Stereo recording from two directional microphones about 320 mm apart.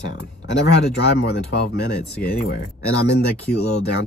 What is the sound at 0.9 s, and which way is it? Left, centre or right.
Speech, left.